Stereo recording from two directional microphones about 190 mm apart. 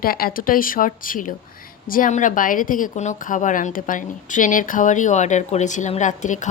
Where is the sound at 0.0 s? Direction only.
50° left (ahead or behind).